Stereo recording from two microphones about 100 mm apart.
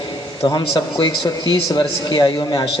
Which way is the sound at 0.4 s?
45° left (ahead or behind).